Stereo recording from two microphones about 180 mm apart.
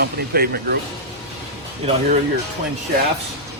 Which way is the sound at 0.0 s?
60° right (ahead or behind).